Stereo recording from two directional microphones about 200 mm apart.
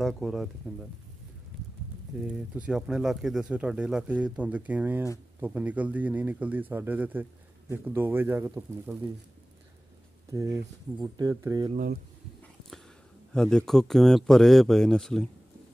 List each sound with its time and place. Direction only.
0.0 s speech: centre (ahead or behind)
2.5 s speech: 5° right (ahead or behind)
10.3 s speech: 15° right (ahead or behind)
11.7 s speech: 50° right (ahead or behind)
13.3 s speech: 5° left (ahead or behind)